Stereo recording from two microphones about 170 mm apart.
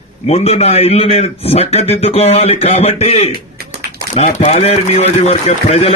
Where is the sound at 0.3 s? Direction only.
35° left (ahead or behind).